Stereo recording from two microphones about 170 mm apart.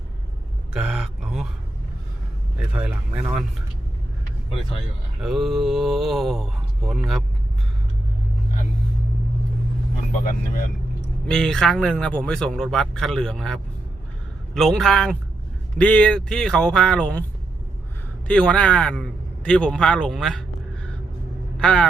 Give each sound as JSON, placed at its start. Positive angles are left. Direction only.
{"t": 0.7, "sound": "speech", "side_deg": -5}
{"t": 2.7, "sound": "speech", "side_deg": -5}
{"t": 5.2, "sound": "speech", "side_deg": 0}
{"t": 10.1, "sound": "speech", "side_deg": 55}
{"t": 11.3, "sound": "speech", "side_deg": 5}
{"t": 18.3, "sound": "speech", "side_deg": 5}
{"t": 21.6, "sound": "speech", "side_deg": 5}